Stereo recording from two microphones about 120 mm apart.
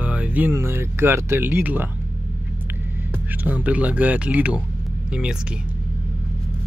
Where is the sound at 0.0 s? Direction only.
10° right (ahead or behind).